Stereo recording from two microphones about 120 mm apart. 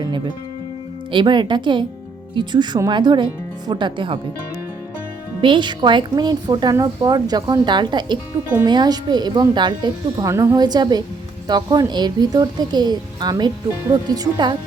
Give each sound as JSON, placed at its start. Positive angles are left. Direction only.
{"t": 0.0, "sound": "a woman's voice", "side_deg": -40}
{"t": 5.4, "sound": "a woman's voice", "side_deg": -40}